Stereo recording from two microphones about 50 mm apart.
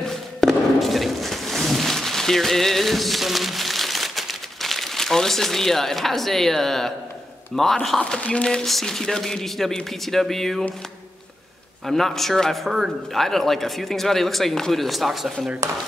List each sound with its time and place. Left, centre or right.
0.0 s a sound: centre
7.5 s speech: centre
8.2 s speech: left
8.6 s speech: centre
11.8 s speech: centre